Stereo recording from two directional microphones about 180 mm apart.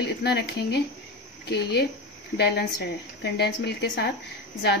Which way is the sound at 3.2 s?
70° left (ahead or behind).